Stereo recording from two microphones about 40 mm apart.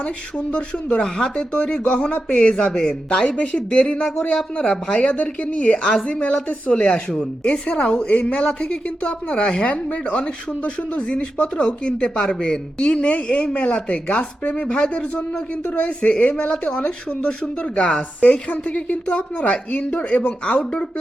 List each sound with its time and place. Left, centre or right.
1.0 s speech: left
5.1 s speech: left
6.3 s speech: left
16.5 s speech: left
19.0 s speech: left